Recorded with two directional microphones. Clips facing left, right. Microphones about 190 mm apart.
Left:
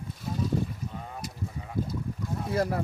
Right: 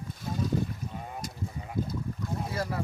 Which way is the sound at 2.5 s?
50° left (ahead or behind).